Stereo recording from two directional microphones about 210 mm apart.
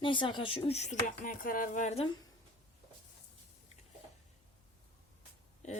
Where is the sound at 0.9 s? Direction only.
40° left (ahead or behind).